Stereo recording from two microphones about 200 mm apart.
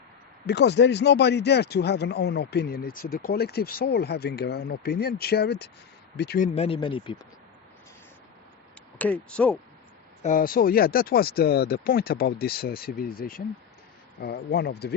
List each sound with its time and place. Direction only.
0.4 s speech: 55° left (ahead or behind)
6.4 s speech: 30° left (ahead or behind)
9.0 s speech: 5° left (ahead or behind)
10.2 s speech: 45° left (ahead or behind)